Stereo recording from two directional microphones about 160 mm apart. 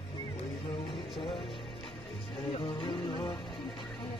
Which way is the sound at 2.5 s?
30° left (ahead or behind).